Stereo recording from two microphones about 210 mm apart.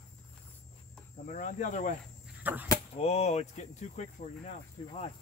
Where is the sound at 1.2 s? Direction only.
35° left (ahead or behind).